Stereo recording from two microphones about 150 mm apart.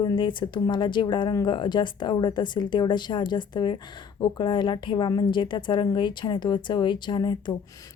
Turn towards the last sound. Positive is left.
turn(degrees=30)  # may be behind; listen again after turning